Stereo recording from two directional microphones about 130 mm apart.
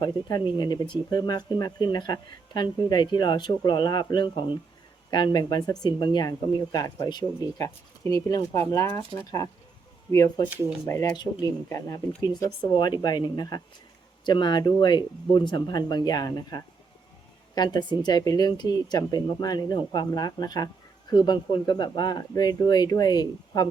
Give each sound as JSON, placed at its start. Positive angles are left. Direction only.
{"t": 0.0, "sound": "speech", "side_deg": 35}
{"t": 10.1, "sound": "speech", "side_deg": 30}
{"t": 11.1, "sound": "speech", "side_deg": 30}